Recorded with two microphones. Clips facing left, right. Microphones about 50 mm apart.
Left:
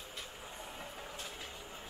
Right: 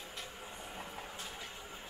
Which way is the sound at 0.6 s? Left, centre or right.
Centre.